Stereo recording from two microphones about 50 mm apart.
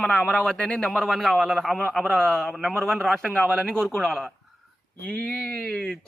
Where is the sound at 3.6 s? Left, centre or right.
Centre.